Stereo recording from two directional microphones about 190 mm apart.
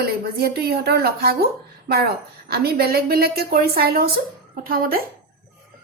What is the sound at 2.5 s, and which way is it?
Speech, 55° right (ahead or behind).